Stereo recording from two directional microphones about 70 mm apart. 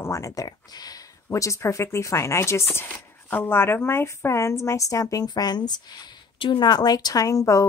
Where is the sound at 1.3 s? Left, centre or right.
Left.